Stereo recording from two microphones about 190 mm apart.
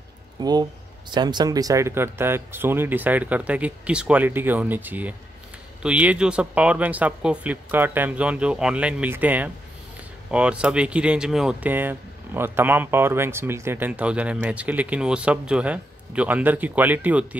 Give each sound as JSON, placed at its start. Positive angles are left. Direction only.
{"t": 0.4, "sound": "speech", "side_deg": -20}